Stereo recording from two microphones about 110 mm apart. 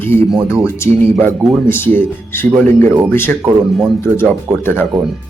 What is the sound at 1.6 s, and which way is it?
Speech, 20° left (ahead or behind).